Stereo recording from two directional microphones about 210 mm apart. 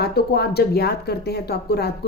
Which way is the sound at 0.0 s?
50° left (ahead or behind).